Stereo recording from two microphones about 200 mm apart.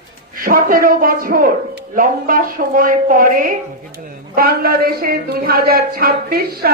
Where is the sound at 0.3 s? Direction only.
45° right (ahead or behind).